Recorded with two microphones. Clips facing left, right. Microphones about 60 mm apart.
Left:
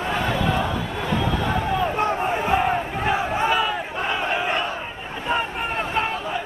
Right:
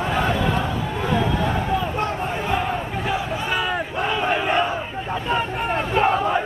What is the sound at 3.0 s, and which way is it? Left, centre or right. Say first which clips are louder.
Crowd: left 5 dB; left.